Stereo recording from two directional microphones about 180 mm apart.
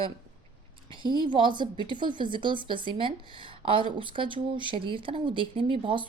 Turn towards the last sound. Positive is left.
turn(degrees=-30)  # may be behind; listen again after turning